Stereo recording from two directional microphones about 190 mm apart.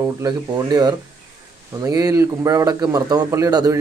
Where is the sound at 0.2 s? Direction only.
20° right (ahead or behind).